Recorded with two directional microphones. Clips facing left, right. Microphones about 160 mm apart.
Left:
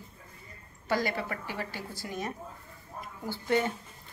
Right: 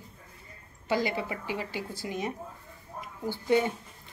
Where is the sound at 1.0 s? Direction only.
15° right (ahead or behind).